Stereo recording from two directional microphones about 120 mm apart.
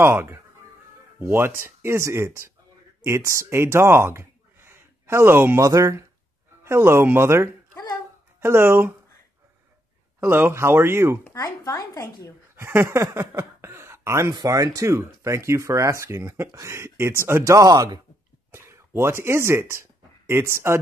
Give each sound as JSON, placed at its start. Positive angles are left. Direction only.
{"t": 0.0, "sound": "speech", "side_deg": -20}
{"t": 10.2, "sound": "speech", "side_deg": -20}
{"t": 11.3, "sound": "a woman's voice", "side_deg": 30}
{"t": 12.5, "sound": "speech", "side_deg": -20}
{"t": 18.5, "sound": "speech", "side_deg": -20}